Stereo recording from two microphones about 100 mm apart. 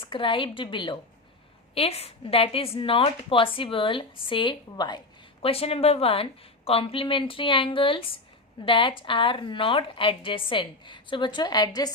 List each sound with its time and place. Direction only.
0.0 s a woman's voice: 60° left (ahead or behind)
1.7 s a woman's voice: 85° left; by 4.9 s 50° left (ahead or behind)
5.4 s a woman's voice: 75° left (ahead or behind); by 11.9 s 40° left (ahead or behind)